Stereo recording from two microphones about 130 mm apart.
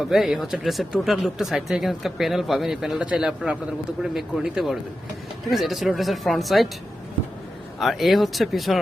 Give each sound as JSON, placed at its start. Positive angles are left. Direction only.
{"t": 0.0, "sound": "speech", "side_deg": 0}
{"t": 7.8, "sound": "speech", "side_deg": 0}